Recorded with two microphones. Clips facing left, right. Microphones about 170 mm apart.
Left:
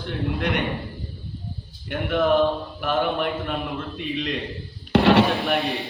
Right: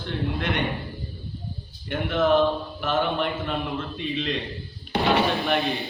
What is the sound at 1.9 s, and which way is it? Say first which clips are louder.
A man's voice: left 1 dB; 5° left (ahead or behind).